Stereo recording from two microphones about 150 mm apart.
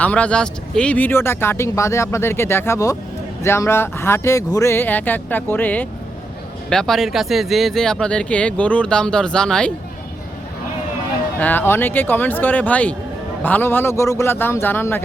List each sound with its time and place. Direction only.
0.0 s speech: 10° left (ahead or behind)
11.3 s speech: 10° left (ahead or behind)